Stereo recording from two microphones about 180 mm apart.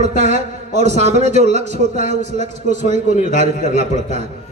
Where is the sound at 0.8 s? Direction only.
40° right (ahead or behind).